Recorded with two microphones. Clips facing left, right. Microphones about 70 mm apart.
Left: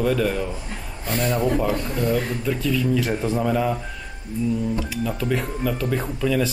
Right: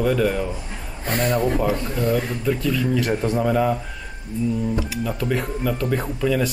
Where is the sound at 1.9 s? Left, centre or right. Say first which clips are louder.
Right 1 dB; centre.